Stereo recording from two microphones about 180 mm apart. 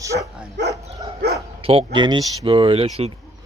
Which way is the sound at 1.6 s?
30° right (ahead or behind).